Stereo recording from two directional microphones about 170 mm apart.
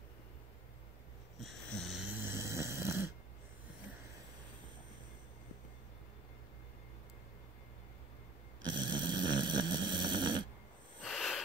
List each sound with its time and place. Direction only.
1.4 s snoring: centre (ahead or behind); by 3.1 s 15° right (ahead or behind)
8.6 s snoring: 25° right (ahead or behind)
11.1 s wheeze: centre (ahead or behind)